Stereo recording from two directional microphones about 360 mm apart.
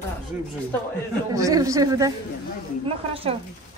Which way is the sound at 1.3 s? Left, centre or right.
Centre.